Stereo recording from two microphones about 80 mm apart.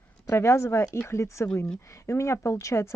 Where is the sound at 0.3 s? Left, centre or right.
Left.